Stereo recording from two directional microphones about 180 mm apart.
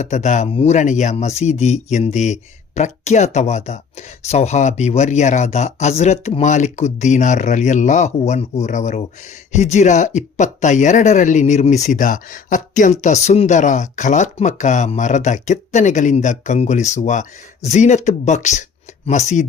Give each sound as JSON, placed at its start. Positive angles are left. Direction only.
{"t": 0.0, "sound": "speech", "side_deg": 40}